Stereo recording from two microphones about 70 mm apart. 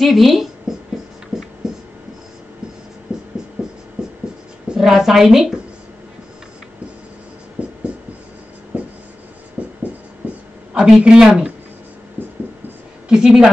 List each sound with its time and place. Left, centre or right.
0.0 s speech: centre
1.3 s writing: centre
3.1 s music: centre
3.6 s a sound: centre
4.6 s a woman's voice: centre
7.6 s music: centre
9.6 s music: right
10.7 s speech: centre
12.2 s music: right
13.1 s speech: centre